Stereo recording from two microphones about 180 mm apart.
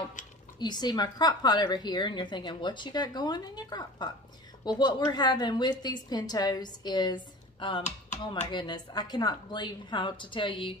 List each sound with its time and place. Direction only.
0.6 s a woman's voice: 25° left (ahead or behind)